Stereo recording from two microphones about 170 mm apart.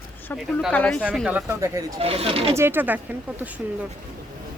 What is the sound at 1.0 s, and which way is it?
Speech, 5° right (ahead or behind).